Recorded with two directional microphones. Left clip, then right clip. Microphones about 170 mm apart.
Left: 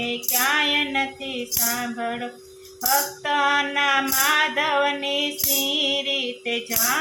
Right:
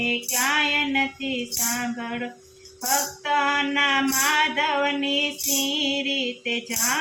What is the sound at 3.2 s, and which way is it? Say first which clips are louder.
Music: left 1 dB; 20° left (ahead or behind).